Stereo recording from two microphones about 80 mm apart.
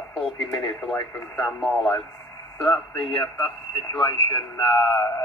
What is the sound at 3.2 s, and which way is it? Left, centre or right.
Speech, left.